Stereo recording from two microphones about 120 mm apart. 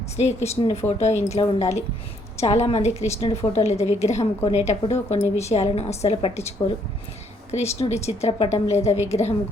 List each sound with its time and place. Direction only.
0.6 s a woman's voice: 60° left (ahead or behind)
7.5 s a woman's voice: 65° left (ahead or behind)